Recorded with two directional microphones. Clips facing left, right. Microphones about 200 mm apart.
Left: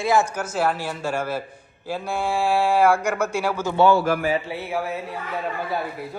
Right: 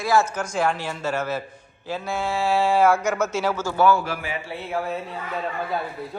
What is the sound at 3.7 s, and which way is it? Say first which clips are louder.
Speech: left 2 dB; 25° left (ahead or behind).